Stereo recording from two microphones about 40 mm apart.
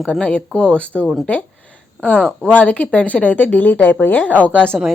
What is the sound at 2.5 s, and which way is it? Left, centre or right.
Speech, left.